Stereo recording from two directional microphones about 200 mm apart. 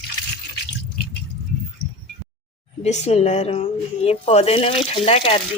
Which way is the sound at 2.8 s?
35° left (ahead or behind).